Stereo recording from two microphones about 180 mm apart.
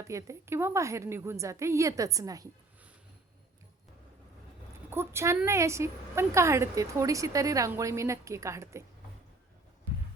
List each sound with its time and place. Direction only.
0.0 s a woman's voice: 15° right (ahead or behind)
4.9 s a woman's voice: 15° right (ahead or behind)